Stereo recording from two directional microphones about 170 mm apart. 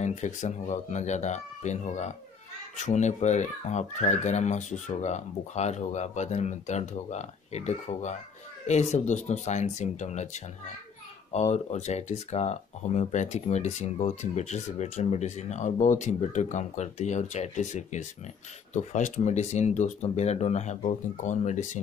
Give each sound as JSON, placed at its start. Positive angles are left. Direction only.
{"t": 0.0, "sound": "speech", "side_deg": 45}
{"t": 11.5, "sound": "speech", "side_deg": 40}